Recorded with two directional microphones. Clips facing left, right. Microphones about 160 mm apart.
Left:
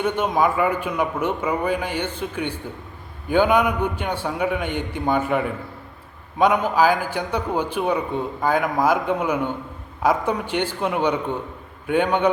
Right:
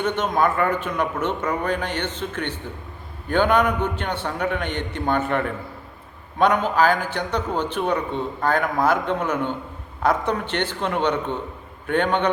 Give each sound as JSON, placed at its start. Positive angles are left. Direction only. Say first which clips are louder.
{"t": 0.0, "sound": "a man's voice", "louder": "left 1 dB", "side_deg": 10}